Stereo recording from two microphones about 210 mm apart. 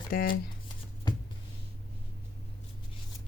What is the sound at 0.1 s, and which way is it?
Speech, 45° left (ahead or behind).